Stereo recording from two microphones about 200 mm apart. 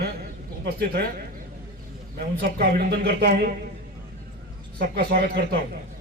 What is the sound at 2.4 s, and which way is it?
Speech, 50° right (ahead or behind).